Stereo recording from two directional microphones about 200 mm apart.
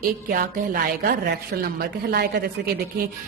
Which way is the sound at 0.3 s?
45° right (ahead or behind).